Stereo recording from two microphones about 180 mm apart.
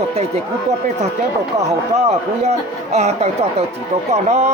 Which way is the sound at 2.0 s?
40° right (ahead or behind).